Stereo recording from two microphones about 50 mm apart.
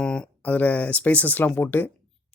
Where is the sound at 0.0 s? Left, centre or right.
Centre.